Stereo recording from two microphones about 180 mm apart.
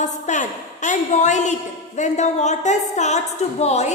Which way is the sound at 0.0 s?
40° left (ahead or behind).